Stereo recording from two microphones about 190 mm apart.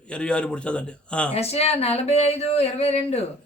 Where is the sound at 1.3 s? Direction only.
35° left (ahead or behind).